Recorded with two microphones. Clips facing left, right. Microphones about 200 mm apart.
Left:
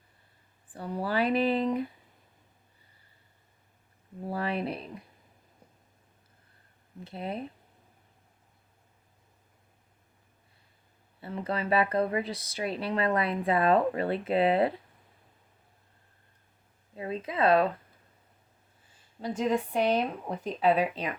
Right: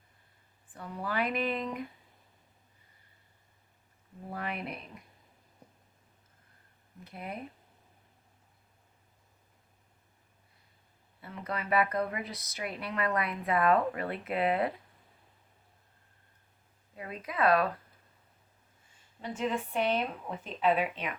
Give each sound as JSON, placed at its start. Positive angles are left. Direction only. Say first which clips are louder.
{"t": 0.7, "sound": "speech", "louder": "left 5 dB", "side_deg": 35}
{"t": 4.3, "sound": "speech", "louder": "left 6 dB", "side_deg": 30}
{"t": 7.0, "sound": "speech", "louder": "left 6 dB", "side_deg": 30}
{"t": 11.2, "sound": "speech", "louder": "left 6 dB", "side_deg": 30}
{"t": 16.9, "sound": "speech", "louder": "left 6 dB", "side_deg": 25}
{"t": 19.2, "sound": "speech", "louder": "left 5 dB", "side_deg": 35}